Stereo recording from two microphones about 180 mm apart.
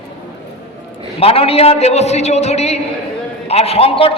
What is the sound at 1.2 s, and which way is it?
A man's voice, 30° left (ahead or behind).